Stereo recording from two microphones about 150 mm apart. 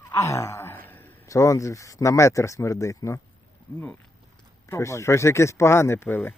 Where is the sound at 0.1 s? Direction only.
20° left (ahead or behind).